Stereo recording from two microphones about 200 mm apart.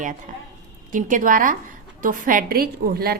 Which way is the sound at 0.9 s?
40° right (ahead or behind).